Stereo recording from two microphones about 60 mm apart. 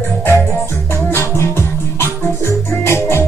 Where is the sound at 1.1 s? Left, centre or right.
Left.